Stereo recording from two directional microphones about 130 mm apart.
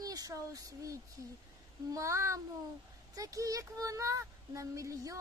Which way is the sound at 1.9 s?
25° right (ahead or behind).